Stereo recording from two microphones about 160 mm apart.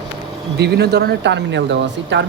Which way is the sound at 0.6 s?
90° right.